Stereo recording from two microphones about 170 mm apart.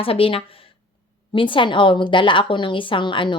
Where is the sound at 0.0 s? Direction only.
35° left (ahead or behind).